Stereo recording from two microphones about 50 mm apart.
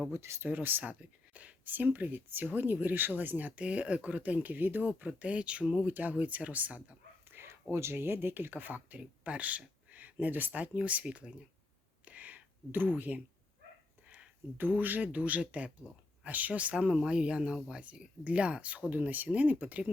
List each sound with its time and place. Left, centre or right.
0.1 s speech: right
0.4 s speech: right; by 5.9 s centre
5.9 s speech: right
7.3 s a sound: right
7.7 s speech: right
12.0 s a sound: right
14.6 s speech: right